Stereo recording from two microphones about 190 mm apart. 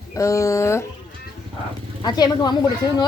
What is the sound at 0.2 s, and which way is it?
Speech, 15° left (ahead or behind).